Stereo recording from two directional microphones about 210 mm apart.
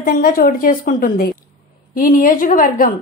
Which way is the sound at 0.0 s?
40° left (ahead or behind).